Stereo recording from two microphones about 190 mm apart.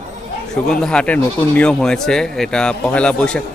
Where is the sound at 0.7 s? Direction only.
5° left (ahead or behind).